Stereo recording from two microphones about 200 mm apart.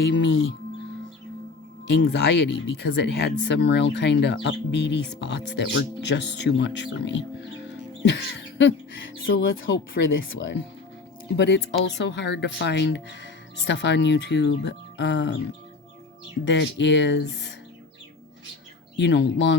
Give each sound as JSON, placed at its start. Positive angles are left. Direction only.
{"t": 0.0, "sound": "speech", "side_deg": 65}
{"t": 1.9, "sound": "speech", "side_deg": 60}
{"t": 11.3, "sound": "speech", "side_deg": 60}
{"t": 16.5, "sound": "speech", "side_deg": 60}
{"t": 18.9, "sound": "speech", "side_deg": 60}